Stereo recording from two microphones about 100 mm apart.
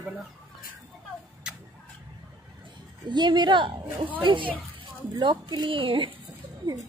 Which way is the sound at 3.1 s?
50° right (ahead or behind).